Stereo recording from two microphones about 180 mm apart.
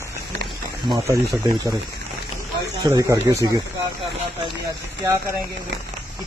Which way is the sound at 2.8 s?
20° right (ahead or behind).